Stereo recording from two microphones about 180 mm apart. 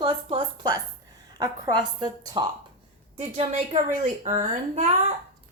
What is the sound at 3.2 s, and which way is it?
A woman's voice, 35° right (ahead or behind).